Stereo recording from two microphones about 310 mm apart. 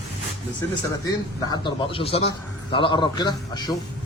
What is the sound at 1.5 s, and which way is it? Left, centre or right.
Speech, centre.